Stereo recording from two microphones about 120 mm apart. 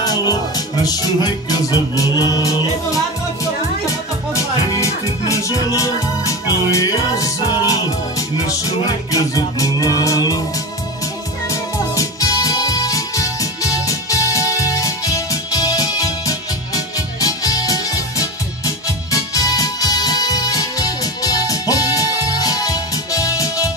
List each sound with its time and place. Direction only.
0.0 s music: 35° left (ahead or behind)
5.3 s music: 30° left (ahead or behind)
11.9 s music: 30° left (ahead or behind)